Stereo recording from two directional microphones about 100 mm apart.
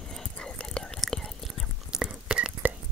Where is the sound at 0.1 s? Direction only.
5° left (ahead or behind).